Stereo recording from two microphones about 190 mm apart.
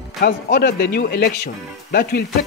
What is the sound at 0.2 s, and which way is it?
Speech, 55° left (ahead or behind).